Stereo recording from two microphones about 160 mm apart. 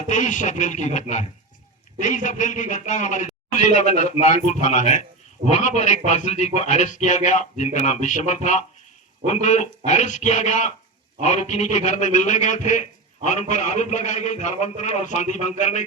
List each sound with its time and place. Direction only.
0.1 s a man's voice: 50° left (ahead or behind)